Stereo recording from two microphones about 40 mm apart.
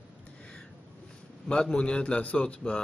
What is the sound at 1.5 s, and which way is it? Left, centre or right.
A man's voice, left.